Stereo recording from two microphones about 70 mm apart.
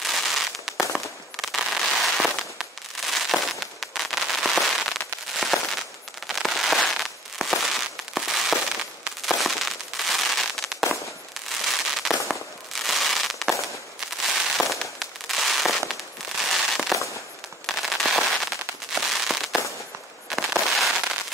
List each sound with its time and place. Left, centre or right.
0.0 s fireworks: centre
5.3 s firecracker: centre
6.2 s fireworks: centre
17.6 s firecracker: centre
18.9 s fireworks: centre